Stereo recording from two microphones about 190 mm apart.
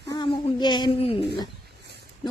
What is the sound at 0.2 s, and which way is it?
Speech, 25° left (ahead or behind).